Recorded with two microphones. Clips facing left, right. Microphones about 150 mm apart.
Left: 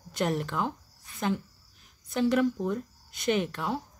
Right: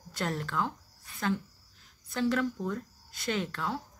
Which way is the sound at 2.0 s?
20° left (ahead or behind).